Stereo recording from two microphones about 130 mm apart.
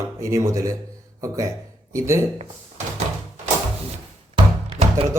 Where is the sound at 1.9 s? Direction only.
20° right (ahead or behind).